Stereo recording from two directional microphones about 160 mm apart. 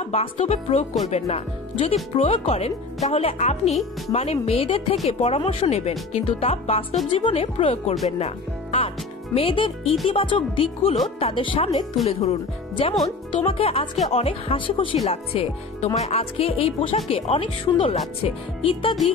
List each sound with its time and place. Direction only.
0.1 s speech: 40° left (ahead or behind)